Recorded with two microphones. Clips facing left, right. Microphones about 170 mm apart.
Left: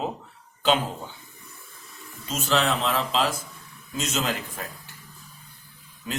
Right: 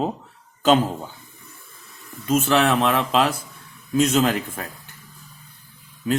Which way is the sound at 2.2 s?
55° right (ahead or behind).